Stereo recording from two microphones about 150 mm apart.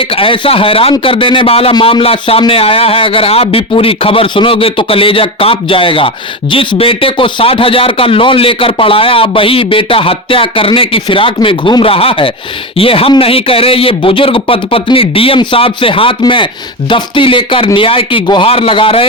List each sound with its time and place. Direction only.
0.0 s speech: 35° left (ahead or behind)